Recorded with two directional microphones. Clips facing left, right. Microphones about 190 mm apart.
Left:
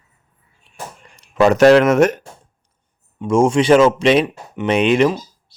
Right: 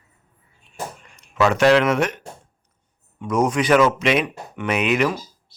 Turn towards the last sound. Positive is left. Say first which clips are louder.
# left 6 dB
turn(degrees=30)  # may be behind; listen again after turning